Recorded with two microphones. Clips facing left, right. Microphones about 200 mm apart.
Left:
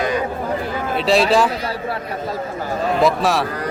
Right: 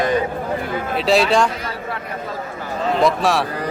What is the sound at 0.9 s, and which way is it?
Speech, centre (ahead or behind).